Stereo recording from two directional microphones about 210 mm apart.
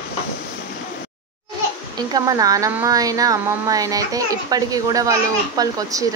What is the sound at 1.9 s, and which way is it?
Speech, 15° right (ahead or behind).